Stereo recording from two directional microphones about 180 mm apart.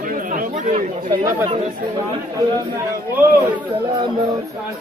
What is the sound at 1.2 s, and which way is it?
Speech, 20° right (ahead or behind).